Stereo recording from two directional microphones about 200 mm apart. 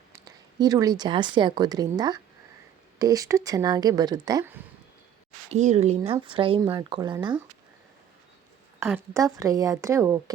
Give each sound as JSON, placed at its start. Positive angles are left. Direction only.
{"t": 0.1, "sound": "speech", "side_deg": -20}
{"t": 5.5, "sound": "speech", "side_deg": -35}
{"t": 8.8, "sound": "speech", "side_deg": -10}